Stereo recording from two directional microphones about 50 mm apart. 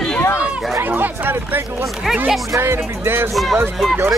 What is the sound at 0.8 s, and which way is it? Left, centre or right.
Chatter, right.